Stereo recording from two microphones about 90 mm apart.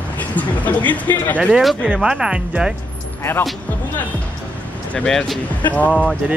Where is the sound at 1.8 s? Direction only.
10° right (ahead or behind).